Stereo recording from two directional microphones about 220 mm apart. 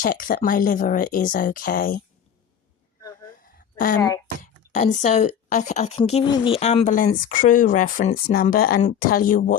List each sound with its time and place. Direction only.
0.0 s a woman's voice: 40° left (ahead or behind)
3.4 s a sound: 40° left (ahead or behind)
4.7 s a woman's voice: 35° left (ahead or behind)